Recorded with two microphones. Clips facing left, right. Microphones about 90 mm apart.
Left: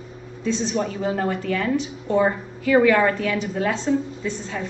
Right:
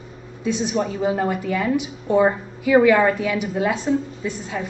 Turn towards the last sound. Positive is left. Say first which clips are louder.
# right 1 dB
turn(degrees=-10)  # may be behind; listen again after turning